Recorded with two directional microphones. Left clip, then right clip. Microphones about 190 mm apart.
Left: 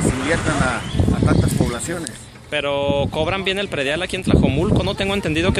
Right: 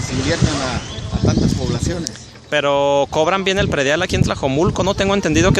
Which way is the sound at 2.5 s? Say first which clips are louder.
Right 5 dB; 25° right (ahead or behind).